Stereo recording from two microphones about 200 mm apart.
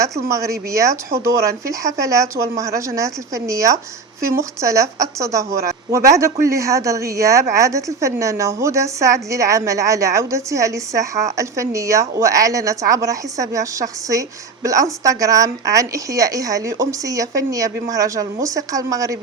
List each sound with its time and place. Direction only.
0.0 s a woman's voice: 15° right (ahead or behind)